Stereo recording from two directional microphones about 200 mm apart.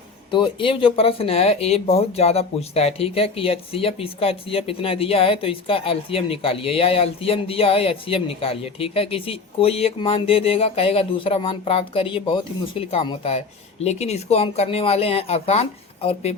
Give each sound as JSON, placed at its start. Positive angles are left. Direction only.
{"t": 0.3, "sound": "speech", "side_deg": 25}